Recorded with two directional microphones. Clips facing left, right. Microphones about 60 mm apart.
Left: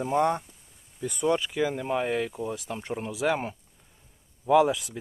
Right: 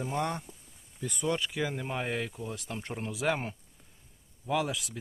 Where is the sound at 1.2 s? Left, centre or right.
Centre.